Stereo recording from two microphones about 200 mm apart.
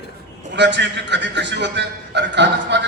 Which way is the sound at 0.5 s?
60° right (ahead or behind).